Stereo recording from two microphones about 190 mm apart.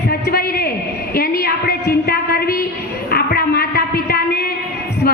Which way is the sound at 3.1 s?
55° left (ahead or behind).